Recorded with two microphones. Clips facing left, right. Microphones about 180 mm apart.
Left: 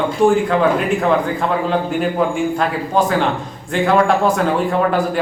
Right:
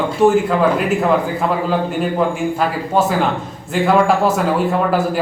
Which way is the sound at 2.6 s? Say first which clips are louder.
Right 3 dB; 5° right (ahead or behind).